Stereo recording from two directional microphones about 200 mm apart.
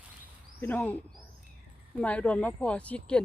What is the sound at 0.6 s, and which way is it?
Speech, 10° left (ahead or behind).